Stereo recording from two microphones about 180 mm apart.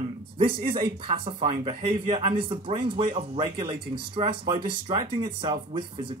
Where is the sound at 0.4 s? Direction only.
30° right (ahead or behind).